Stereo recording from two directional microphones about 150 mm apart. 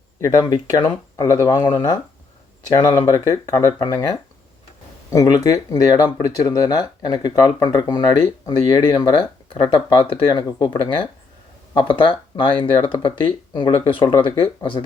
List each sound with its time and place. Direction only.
0.2 s speech: 25° left (ahead or behind)